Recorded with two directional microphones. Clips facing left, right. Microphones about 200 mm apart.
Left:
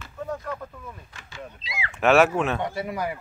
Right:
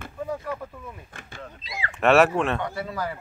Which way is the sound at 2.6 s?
20° left (ahead or behind).